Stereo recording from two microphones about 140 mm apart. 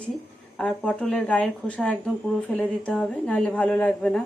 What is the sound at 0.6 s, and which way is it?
A woman's voice, 5° left (ahead or behind).